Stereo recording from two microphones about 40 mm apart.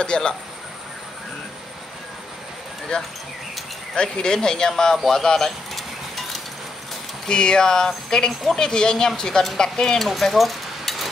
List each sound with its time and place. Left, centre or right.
0.0 s speech: left
3.9 s speech: left
5.8 s a sound: centre
7.2 s speech: centre
10.0 s speech: centre